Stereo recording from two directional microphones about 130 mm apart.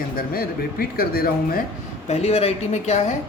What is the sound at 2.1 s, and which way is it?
Speech, 50° left (ahead or behind).